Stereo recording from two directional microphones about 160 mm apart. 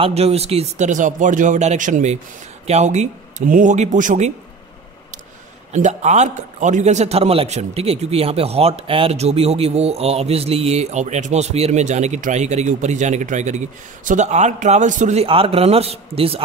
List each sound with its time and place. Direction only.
0.0 s a man's voice: 40° right (ahead or behind)
5.7 s a man's voice: 45° right (ahead or behind)